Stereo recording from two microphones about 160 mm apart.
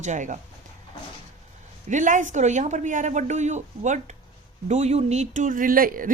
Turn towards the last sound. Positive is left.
turn(degrees=-60)  # may be behind; listen again after turning